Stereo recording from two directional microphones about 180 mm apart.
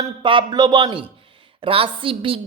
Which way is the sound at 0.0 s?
25° right (ahead or behind).